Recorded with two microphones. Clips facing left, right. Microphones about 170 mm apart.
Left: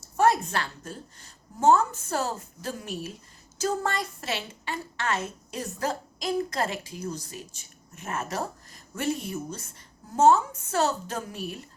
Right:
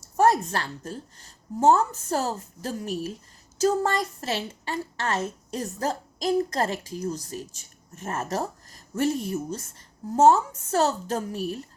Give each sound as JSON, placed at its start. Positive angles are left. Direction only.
{"t": 0.2, "sound": "a woman's voice", "side_deg": -40}